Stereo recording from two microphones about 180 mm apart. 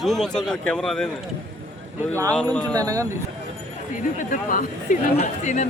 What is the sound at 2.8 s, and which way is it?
Speech, 20° right (ahead or behind).